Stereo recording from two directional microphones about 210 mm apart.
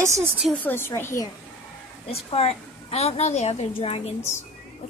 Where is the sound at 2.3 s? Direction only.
30° left (ahead or behind).